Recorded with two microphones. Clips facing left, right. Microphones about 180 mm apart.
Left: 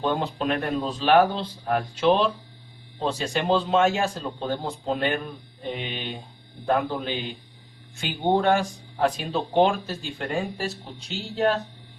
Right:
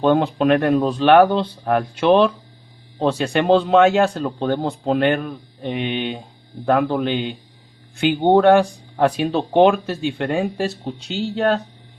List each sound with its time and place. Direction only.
0.0 s speech: 60° right (ahead or behind)